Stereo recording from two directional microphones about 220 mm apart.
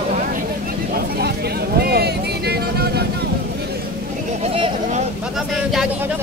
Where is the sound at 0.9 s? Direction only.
45° right (ahead or behind).